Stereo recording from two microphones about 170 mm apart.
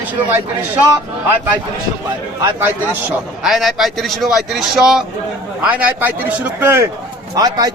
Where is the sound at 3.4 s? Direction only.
Centre (ahead or behind).